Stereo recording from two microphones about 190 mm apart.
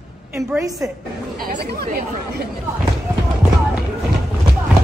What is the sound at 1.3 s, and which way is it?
Speech, 50° right (ahead or behind).